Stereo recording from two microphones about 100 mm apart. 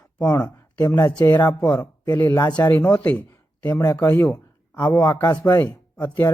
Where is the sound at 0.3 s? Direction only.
15° left (ahead or behind).